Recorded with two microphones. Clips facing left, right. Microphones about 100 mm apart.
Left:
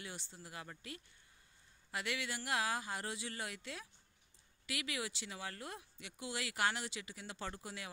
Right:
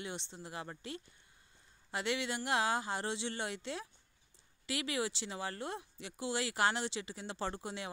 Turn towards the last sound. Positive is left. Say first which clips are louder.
# right 6 dB
turn(degrees=-30)  # may be behind; listen again after turning